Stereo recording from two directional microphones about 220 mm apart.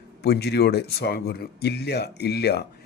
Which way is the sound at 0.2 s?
50° left (ahead or behind).